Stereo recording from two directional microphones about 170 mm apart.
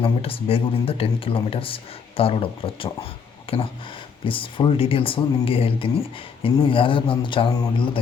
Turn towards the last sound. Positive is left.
turn(degrees=30)  # may be behind; listen again after turning